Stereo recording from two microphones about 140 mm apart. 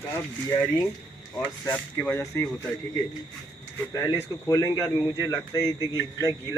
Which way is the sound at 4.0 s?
20° left (ahead or behind).